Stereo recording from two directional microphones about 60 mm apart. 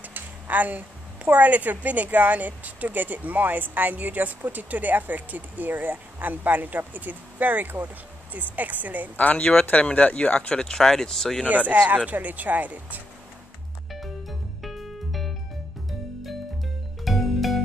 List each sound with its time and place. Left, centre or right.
0.0 s a woman's voice: right
9.1 s speech: left
10.6 s speech: centre
11.4 s a woman's voice: right
14.6 s music: centre
17.0 s music: centre